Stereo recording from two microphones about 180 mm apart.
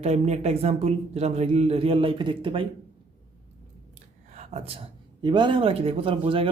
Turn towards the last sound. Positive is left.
turn(degrees=-30)  # may be behind; listen again after turning